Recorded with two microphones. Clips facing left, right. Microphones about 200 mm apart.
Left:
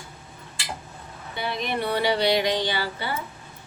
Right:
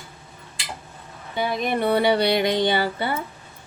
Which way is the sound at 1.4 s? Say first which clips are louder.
Right 5 dB; 45° right (ahead or behind).